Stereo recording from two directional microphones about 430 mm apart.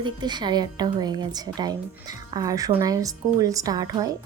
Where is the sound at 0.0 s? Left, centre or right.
Centre.